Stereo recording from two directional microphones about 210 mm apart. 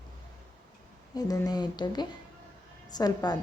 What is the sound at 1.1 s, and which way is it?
A woman's voice, 20° left (ahead or behind).